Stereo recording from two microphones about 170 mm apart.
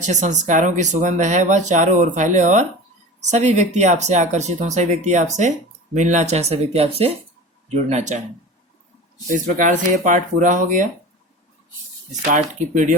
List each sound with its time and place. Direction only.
0.0 s speech: 45° right (ahead or behind)
9.6 s speech: 50° right (ahead or behind)
12.3 s speech: 50° right (ahead or behind)